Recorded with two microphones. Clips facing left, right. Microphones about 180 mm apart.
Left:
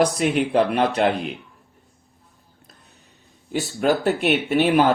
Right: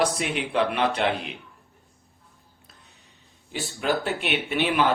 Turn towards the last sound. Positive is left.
turn(degrees=45)  # may be behind; listen again after turning